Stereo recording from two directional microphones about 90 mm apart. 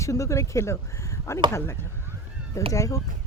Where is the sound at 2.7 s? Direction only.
40° left (ahead or behind).